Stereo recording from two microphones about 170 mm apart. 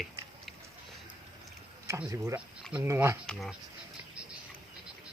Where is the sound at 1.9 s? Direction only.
15° right (ahead or behind).